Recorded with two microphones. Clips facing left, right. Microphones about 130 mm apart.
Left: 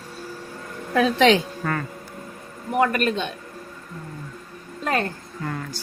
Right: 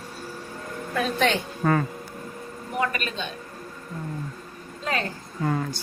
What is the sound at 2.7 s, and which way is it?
Speech, 55° left (ahead or behind).